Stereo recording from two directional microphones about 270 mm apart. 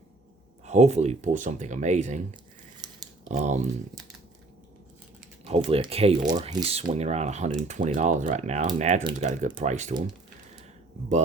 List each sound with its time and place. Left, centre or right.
0.6 s speech: right
2.8 s a sound: centre
3.2 s speech: right
5.5 s speech: right